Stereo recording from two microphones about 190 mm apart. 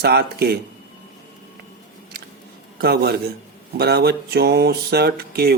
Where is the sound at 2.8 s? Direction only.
55° right (ahead or behind).